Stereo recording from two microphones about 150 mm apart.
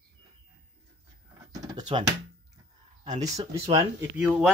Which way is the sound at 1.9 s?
35° right (ahead or behind).